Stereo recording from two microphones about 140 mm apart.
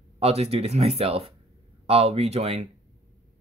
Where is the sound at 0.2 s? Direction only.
50° right (ahead or behind).